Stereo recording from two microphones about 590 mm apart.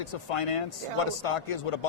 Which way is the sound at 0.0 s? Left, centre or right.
Left.